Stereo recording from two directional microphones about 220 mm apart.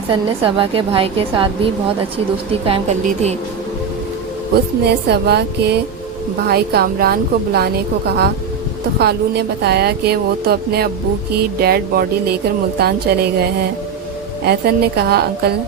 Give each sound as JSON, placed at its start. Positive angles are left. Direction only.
{"t": 0.1, "sound": "a woman's voice", "side_deg": -25}
{"t": 4.5, "sound": "a woman's voice", "side_deg": -50}